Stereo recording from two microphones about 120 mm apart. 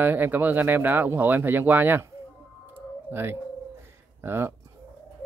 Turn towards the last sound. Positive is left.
turn(degrees=-20)  # may be behind; listen again after turning